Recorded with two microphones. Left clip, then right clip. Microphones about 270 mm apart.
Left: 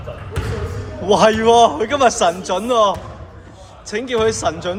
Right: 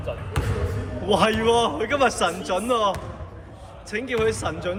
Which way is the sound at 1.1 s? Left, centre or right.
Centre.